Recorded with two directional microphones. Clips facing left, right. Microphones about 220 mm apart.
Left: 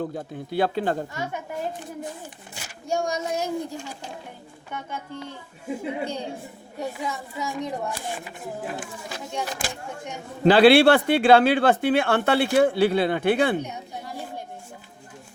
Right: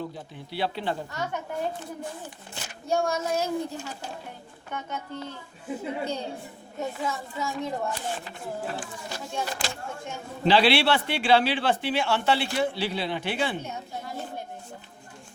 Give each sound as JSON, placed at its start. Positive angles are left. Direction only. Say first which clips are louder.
{"t": 0.0, "sound": "speech", "louder": "left 6 dB", "side_deg": 50}
{"t": 1.1, "sound": "a child's voice", "louder": "left 1 dB", "side_deg": 10}
{"t": 2.8, "sound": "a child's voice", "louder": "even", "side_deg": 15}
{"t": 10.4, "sound": "speech", "louder": "left 7 dB", "side_deg": 50}